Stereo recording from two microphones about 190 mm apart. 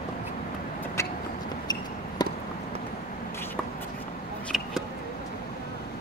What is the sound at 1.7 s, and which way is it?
Basketball bounce, 20° left (ahead or behind).